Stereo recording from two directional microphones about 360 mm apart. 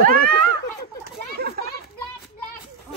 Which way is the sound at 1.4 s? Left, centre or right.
Right.